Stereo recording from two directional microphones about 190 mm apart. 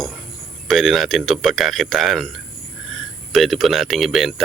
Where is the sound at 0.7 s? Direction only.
Centre (ahead or behind).